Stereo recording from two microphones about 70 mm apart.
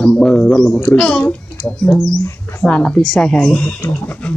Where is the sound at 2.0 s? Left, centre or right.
Centre.